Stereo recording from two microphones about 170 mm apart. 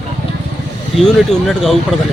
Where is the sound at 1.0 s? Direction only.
Centre (ahead or behind).